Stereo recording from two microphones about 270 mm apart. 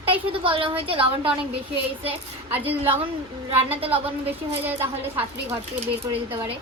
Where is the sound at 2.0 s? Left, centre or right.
Centre.